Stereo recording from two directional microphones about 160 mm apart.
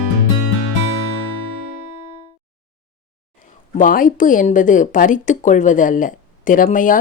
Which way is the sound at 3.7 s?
55° left (ahead or behind).